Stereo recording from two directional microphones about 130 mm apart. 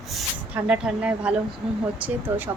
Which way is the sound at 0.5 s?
10° right (ahead or behind).